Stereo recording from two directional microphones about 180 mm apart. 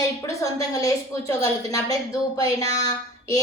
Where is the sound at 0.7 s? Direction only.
20° left (ahead or behind).